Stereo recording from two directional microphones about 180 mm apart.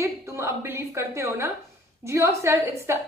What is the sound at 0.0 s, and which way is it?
A woman's voice, 15° right (ahead or behind).